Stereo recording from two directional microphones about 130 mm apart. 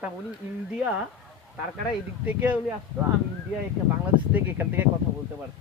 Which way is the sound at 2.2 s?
10° right (ahead or behind).